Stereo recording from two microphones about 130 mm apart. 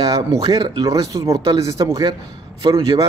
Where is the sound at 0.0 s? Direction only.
30° right (ahead or behind).